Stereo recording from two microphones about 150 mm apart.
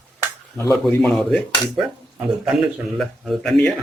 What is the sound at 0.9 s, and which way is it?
Speech, 5° left (ahead or behind).